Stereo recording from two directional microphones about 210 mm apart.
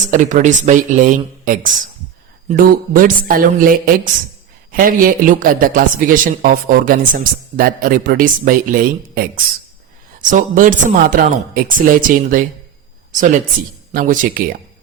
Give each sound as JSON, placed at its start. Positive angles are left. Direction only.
{"t": 0.1, "sound": "speech", "side_deg": -35}
{"t": 13.9, "sound": "speech", "side_deg": -40}